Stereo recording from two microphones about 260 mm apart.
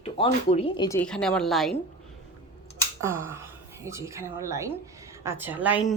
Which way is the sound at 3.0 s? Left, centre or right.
Centre.